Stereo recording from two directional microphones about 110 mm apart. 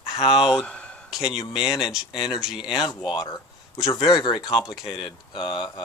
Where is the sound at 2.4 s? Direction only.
5° right (ahead or behind).